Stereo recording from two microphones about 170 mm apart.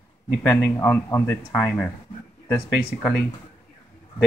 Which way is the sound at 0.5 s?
15° left (ahead or behind).